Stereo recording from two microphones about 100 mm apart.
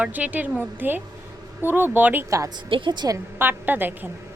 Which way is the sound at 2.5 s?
50° right (ahead or behind).